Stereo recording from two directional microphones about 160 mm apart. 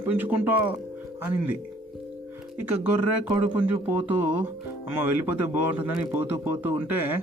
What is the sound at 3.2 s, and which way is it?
Speech, 10° right (ahead or behind).